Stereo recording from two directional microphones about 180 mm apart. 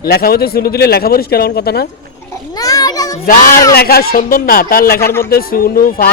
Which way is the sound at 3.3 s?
50° left (ahead or behind).